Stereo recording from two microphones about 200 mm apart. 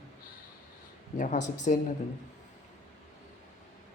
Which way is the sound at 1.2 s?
35° left (ahead or behind).